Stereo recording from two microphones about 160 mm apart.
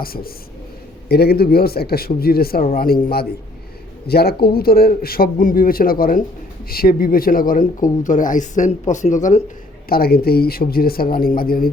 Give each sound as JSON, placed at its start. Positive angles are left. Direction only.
{"t": 0.0, "sound": "a man's voice", "side_deg": 70}
{"t": 1.0, "sound": "a man's voice", "side_deg": 80}
{"t": 9.9, "sound": "a man's voice", "side_deg": 70}